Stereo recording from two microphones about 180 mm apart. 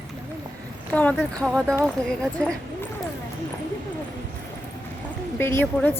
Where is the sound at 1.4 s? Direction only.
5° left (ahead or behind).